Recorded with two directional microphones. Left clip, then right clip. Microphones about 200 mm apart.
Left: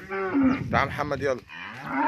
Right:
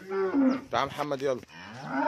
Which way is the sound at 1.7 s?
40° right (ahead or behind).